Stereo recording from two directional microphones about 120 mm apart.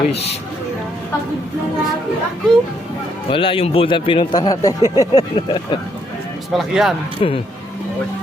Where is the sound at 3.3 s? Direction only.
45° left (ahead or behind).